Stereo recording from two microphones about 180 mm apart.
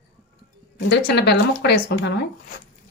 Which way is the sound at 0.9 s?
65° left (ahead or behind).